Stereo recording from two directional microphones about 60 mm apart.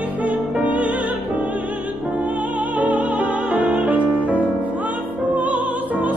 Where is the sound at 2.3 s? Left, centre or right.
Right.